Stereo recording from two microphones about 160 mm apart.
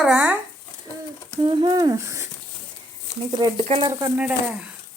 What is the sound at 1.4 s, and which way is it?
Speech, 30° right (ahead or behind).